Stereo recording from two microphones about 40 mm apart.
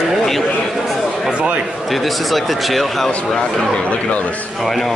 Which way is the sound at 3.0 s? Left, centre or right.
Centre.